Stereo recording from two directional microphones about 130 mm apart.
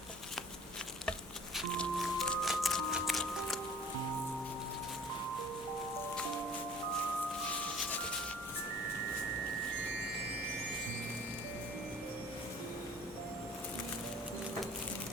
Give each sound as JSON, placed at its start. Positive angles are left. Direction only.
{"t": 1.5, "sound": "music", "side_deg": 5}